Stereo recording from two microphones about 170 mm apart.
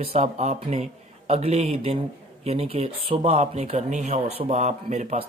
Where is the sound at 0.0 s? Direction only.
40° right (ahead or behind).